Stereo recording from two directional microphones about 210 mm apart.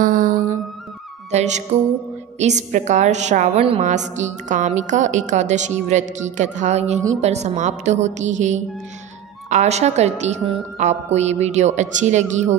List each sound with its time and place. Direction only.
0.0 s music: 40° right (ahead or behind)
1.3 s a woman's voice: 35° right (ahead or behind)